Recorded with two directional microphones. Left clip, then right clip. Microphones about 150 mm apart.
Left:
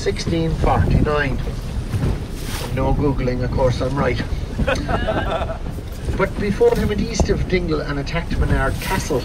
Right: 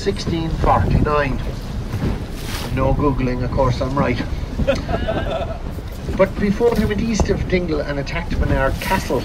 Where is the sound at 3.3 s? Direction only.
50° right (ahead or behind).